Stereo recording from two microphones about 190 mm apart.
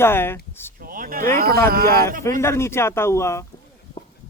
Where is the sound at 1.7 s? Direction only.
50° right (ahead or behind).